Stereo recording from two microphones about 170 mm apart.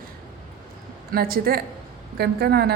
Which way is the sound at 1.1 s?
60° right (ahead or behind).